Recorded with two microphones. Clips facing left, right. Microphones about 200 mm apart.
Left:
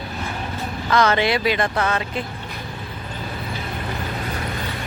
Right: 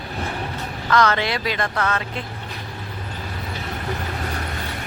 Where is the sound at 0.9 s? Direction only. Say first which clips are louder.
Left 2 dB; 25° left (ahead or behind).